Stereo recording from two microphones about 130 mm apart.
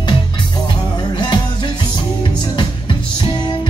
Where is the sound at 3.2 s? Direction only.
35° left (ahead or behind).